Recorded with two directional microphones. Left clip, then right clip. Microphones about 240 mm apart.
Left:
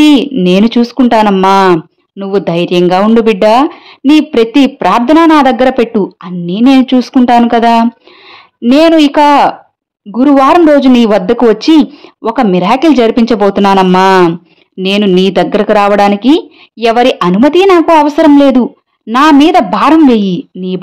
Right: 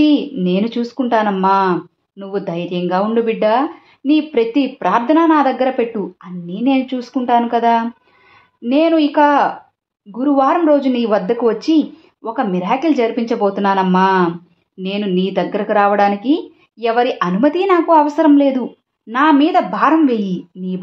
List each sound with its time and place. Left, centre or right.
0.0 s speech: left